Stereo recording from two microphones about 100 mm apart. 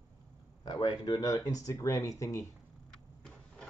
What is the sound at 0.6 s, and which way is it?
Speech, 45° left (ahead or behind).